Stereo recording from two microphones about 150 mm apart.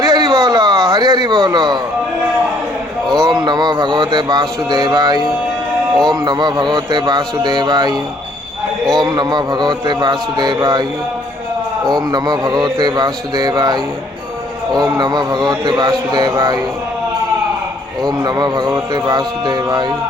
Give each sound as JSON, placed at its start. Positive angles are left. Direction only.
{"t": 0.0, "sound": "a sound", "side_deg": -25}
{"t": 3.2, "sound": "a sound", "side_deg": -30}
{"t": 6.1, "sound": "a man's voice", "side_deg": -25}
{"t": 9.0, "sound": "a man's voice", "side_deg": -30}
{"t": 11.9, "sound": "a man's voice", "side_deg": -25}
{"t": 18.0, "sound": "a man's voice", "side_deg": -25}